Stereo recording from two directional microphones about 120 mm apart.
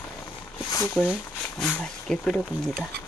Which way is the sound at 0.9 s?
10° right (ahead or behind).